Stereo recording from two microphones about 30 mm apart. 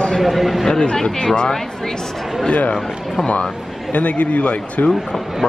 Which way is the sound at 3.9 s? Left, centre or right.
Left.